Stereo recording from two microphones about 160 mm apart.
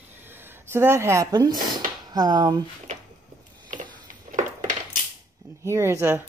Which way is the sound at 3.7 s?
55° right (ahead or behind).